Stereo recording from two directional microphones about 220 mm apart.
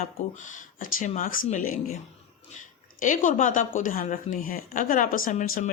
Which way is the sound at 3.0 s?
35° left (ahead or behind).